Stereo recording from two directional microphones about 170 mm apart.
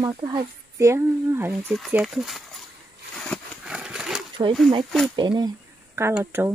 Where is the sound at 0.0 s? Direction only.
25° right (ahead or behind).